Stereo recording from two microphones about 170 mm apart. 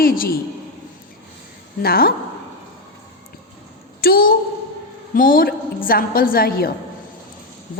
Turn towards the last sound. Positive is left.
turn(degrees=60)  # may be behind; listen again after turning